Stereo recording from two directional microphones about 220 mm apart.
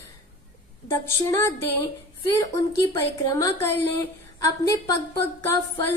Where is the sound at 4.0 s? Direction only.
15° left (ahead or behind).